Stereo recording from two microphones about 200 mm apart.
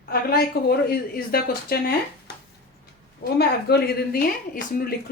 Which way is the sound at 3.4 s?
50° left (ahead or behind).